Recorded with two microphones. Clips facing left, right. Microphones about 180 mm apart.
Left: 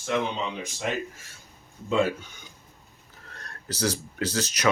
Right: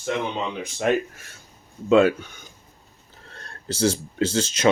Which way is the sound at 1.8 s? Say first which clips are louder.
Right 8 dB; 70° right (ahead or behind).